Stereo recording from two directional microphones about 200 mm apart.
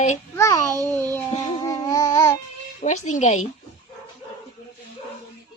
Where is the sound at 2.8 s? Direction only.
35° left (ahead or behind).